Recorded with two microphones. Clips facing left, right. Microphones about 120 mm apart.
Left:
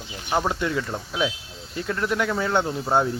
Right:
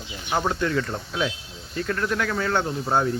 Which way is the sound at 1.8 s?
20° left (ahead or behind).